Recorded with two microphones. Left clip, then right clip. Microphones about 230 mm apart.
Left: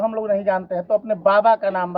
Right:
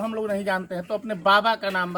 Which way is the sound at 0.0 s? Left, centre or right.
Centre.